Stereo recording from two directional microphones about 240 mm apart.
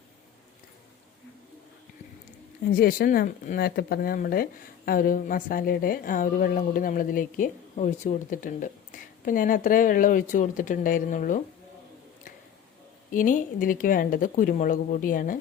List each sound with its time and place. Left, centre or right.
2.7 s a woman's voice: left
13.1 s a woman's voice: left